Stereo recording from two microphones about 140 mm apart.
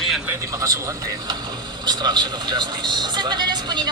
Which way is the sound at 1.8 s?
30° right (ahead or behind).